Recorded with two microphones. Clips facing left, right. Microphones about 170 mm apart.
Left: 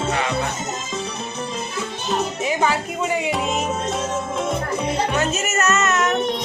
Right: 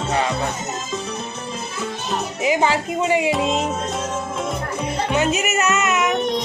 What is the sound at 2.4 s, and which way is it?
Music, 20° right (ahead or behind).